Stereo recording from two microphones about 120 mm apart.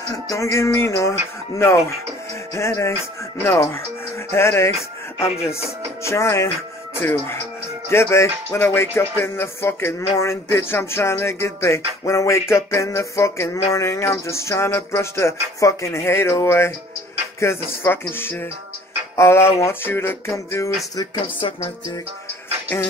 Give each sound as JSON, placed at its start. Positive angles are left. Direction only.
{"t": 0.1, "sound": "music", "side_deg": 25}
{"t": 2.5, "sound": "music", "side_deg": 25}
{"t": 4.3, "sound": "music", "side_deg": 20}
{"t": 5.2, "sound": "music", "side_deg": 55}
{"t": 6.0, "sound": "music", "side_deg": 25}
{"t": 20.9, "sound": "speech", "side_deg": 35}